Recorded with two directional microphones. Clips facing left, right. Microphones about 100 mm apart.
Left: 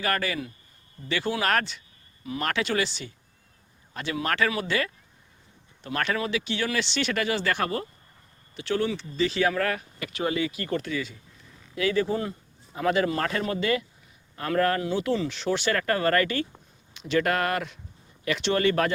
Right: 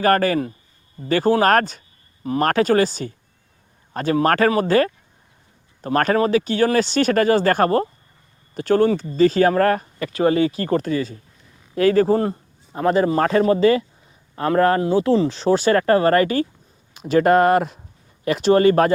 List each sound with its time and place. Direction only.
0.0 s speech: 45° right (ahead or behind)